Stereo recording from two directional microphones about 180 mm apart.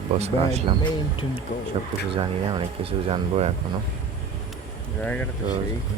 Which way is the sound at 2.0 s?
30° right (ahead or behind).